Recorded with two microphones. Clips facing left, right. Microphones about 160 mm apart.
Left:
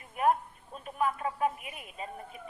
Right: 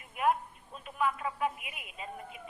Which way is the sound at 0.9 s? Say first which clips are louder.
Left 1 dB; 40° left (ahead or behind).